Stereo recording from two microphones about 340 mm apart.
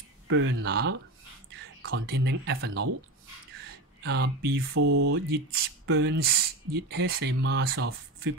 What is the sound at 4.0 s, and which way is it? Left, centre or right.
Speech, right.